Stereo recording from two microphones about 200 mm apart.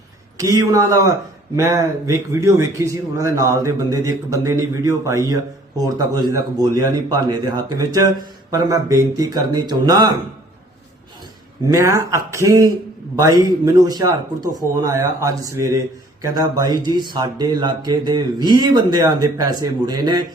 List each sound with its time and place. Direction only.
0.3 s speech: 15° right (ahead or behind)
11.7 s speech: 15° right (ahead or behind)
13.8 s speech: 20° right (ahead or behind)